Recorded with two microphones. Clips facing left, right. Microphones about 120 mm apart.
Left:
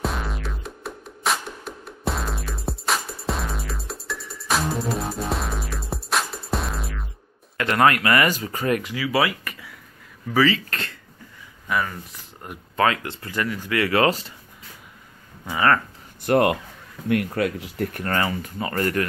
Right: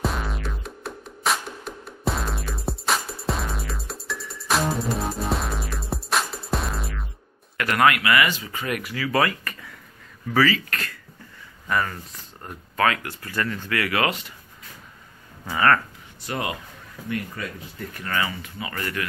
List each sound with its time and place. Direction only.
0.0 s music: centre (ahead or behind)
7.5 s a man's voice: 25° left (ahead or behind)
7.9 s speech: 40° left (ahead or behind)
8.9 s speech: 15° left (ahead or behind)
11.7 s speech: 10° left (ahead or behind)
12.7 s speech: 25° left (ahead or behind)
13.7 s speech: 30° left (ahead or behind)
15.4 s speech: 20° left (ahead or behind)
16.2 s speech: 55° left (ahead or behind)
17.1 s speech: 70° left (ahead or behind)
18.0 s speech: 45° left (ahead or behind)